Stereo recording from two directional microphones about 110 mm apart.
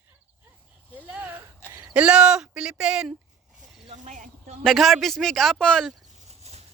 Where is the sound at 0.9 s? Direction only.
15° right (ahead or behind).